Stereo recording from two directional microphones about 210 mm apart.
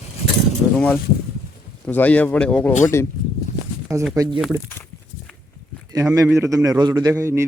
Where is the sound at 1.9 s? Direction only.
10° left (ahead or behind).